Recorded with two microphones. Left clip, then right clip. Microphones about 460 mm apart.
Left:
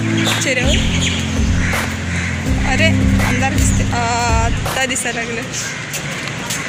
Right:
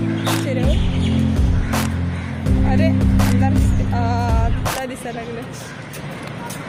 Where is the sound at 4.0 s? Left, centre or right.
Right.